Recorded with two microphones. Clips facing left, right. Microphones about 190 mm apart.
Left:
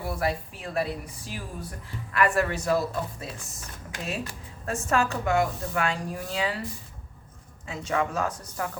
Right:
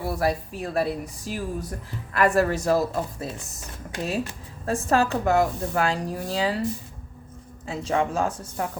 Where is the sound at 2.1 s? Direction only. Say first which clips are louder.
Right 4 dB; 40° right (ahead or behind).